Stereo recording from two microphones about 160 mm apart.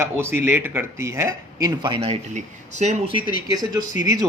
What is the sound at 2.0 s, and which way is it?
Speech, 45° right (ahead or behind).